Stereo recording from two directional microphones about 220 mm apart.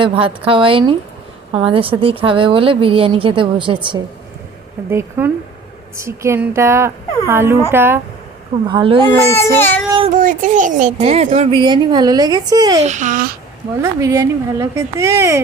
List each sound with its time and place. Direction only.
0.0 s a woman's voice: 25° right (ahead or behind)
4.9 s a woman's voice: 10° right (ahead or behind)
8.6 s a woman's voice: 25° right (ahead or behind)
9.3 s speech: 10° left (ahead or behind)
10.1 s a woman's voice: 35° right (ahead or behind); by 12.8 s 15° right (ahead or behind)
12.8 s a child's voice: 35° right (ahead or behind)
13.8 s a woman's voice: 15° right (ahead or behind)